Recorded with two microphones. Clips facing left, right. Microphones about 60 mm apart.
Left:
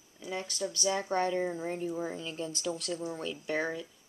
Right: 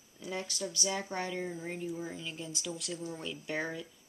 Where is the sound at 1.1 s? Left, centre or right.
Left.